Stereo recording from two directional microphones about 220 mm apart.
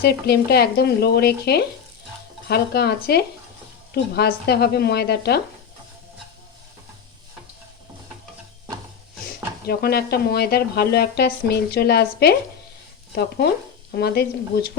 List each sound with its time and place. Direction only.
0.0 s a woman's voice: 45° left (ahead or behind)
9.6 s a woman's voice: 45° left (ahead or behind)